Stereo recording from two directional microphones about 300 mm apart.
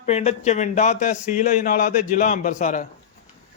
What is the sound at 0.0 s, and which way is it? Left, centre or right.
Speech, left.